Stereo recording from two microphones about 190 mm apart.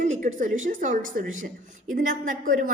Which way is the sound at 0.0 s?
40° right (ahead or behind).